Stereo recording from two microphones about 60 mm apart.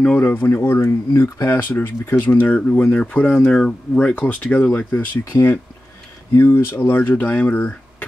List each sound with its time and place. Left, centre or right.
0.0 s speech: centre
0.3 s speech: left
0.6 s speech: left
2.2 s speech: left
4.1 s speech: left